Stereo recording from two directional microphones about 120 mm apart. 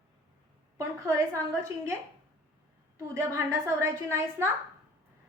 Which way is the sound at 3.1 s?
25° right (ahead or behind).